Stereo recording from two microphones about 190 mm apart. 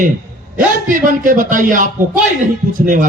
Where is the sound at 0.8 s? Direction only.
45° right (ahead or behind).